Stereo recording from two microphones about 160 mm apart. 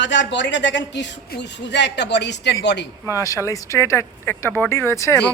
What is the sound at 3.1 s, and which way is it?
Speech, 20° left (ahead or behind).